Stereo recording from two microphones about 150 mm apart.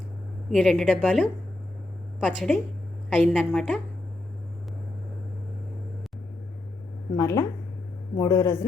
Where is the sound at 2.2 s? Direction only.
5° left (ahead or behind).